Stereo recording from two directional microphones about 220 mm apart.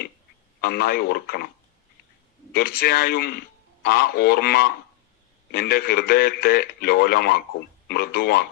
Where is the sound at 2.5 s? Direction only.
45° left (ahead or behind).